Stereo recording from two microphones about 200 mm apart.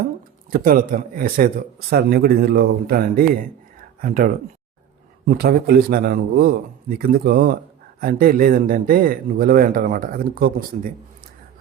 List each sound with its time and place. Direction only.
0.5 s speech: 45° right (ahead or behind)